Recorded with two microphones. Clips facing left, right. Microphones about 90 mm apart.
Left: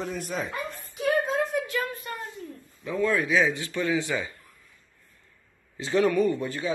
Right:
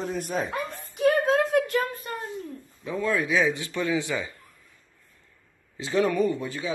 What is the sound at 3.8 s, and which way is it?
Speech, 25° left (ahead or behind).